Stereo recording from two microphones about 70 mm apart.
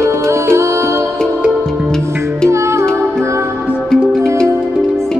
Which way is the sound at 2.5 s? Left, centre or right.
Right.